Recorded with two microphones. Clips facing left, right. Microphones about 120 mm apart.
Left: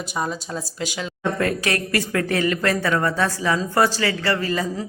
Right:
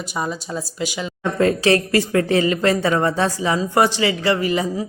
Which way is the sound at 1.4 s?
25° right (ahead or behind).